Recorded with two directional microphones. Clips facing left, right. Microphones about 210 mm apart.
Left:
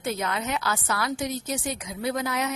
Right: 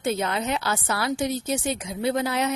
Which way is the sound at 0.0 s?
30° right (ahead or behind).